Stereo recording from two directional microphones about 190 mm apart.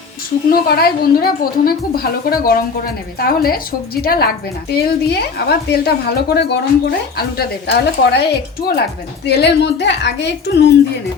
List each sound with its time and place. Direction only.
0.5 s a woman's voice: 50° left (ahead or behind)